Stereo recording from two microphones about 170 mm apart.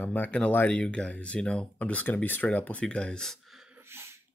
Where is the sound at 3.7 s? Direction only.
15° right (ahead or behind).